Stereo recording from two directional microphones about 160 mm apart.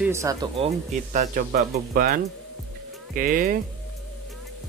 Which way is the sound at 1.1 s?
55° right (ahead or behind).